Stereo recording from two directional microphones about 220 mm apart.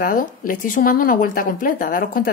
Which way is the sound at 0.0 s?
40° left (ahead or behind).